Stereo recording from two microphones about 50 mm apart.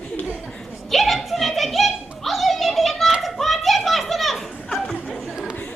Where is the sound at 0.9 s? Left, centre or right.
Centre.